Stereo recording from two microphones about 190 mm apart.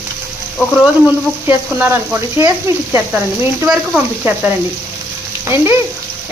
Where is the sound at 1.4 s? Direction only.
10° right (ahead or behind).